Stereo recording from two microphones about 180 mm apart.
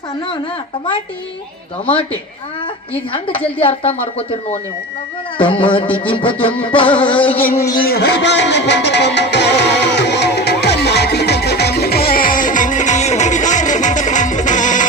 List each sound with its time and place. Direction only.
3.6 s speech: 30° left (ahead or behind)
5.4 s music: 30° left (ahead or behind)
7.3 s speech: 10° left (ahead or behind)
7.7 s music: 55° left (ahead or behind)